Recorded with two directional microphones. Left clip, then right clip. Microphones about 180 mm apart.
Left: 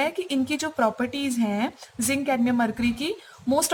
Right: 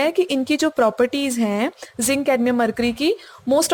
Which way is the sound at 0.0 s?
40° right (ahead or behind).